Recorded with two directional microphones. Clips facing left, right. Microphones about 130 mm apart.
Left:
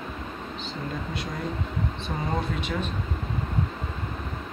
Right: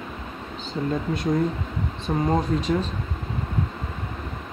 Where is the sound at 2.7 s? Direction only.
30° right (ahead or behind).